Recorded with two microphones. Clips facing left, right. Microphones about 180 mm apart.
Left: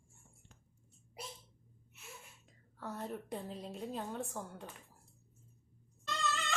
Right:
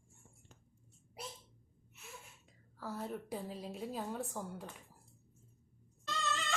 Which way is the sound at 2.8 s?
Centre (ahead or behind).